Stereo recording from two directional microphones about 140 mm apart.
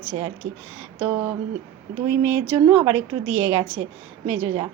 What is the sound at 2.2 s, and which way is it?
Speech, 15° right (ahead or behind).